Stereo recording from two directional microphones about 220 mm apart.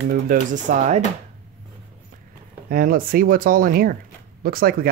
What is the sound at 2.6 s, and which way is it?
Speech, 40° right (ahead or behind).